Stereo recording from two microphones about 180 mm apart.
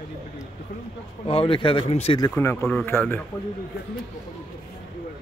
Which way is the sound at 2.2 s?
15° left (ahead or behind).